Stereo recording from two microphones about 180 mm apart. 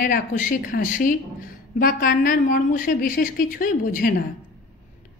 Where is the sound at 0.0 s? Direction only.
50° left (ahead or behind).